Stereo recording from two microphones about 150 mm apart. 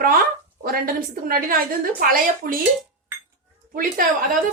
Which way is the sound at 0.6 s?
75° right (ahead or behind).